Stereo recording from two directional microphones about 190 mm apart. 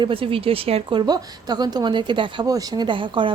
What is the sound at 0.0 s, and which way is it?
A woman's voice, 30° right (ahead or behind).